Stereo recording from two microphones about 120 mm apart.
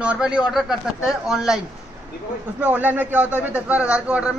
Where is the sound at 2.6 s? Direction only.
15° right (ahead or behind).